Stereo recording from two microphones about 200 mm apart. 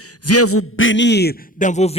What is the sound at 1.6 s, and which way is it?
Speech, 35° left (ahead or behind).